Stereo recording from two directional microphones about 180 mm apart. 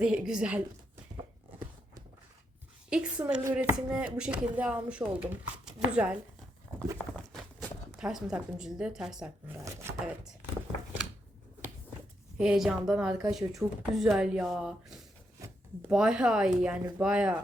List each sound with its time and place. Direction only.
0.0 s speech: 5° right (ahead or behind)
2.9 s speech: 5° right (ahead or behind)
7.9 s speech: 5° right (ahead or behind)
9.6 s chopping: 15° right (ahead or behind)
12.4 s speech: 5° right (ahead or behind)